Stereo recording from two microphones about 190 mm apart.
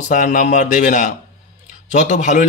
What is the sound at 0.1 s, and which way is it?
A man's voice, 40° left (ahead or behind).